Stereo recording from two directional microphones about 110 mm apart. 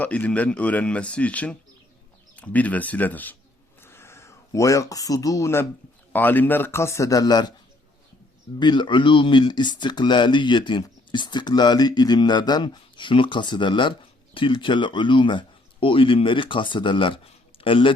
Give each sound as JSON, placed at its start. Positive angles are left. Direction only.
{"t": 0.0, "sound": "speech", "side_deg": 15}
{"t": 3.8, "sound": "a sound", "side_deg": 25}
{"t": 6.1, "sound": "speech", "side_deg": 15}
{"t": 8.5, "sound": "speech", "side_deg": 45}